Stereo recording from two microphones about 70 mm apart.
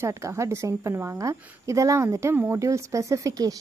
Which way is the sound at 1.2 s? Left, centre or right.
Right.